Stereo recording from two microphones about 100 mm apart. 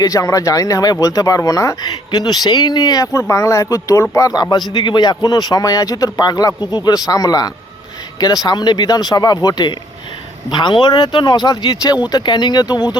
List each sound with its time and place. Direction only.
0.0 s speech: 35° left (ahead or behind)